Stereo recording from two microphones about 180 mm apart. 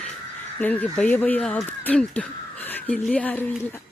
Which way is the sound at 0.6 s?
10° left (ahead or behind).